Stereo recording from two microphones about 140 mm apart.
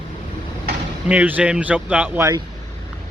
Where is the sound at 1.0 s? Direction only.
10° right (ahead or behind).